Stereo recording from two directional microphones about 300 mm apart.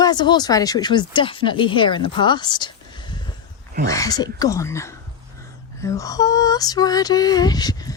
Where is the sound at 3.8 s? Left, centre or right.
Centre.